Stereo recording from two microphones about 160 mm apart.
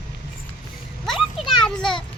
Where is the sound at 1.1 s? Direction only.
30° left (ahead or behind).